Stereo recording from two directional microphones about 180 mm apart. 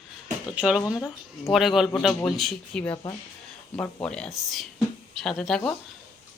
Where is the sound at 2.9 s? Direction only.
25° left (ahead or behind).